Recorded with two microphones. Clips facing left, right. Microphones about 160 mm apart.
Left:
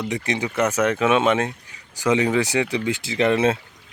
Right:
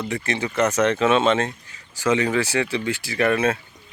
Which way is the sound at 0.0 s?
15° left (ahead or behind).